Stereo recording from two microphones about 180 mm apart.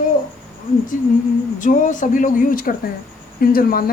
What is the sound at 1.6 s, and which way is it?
Speech, 45° left (ahead or behind).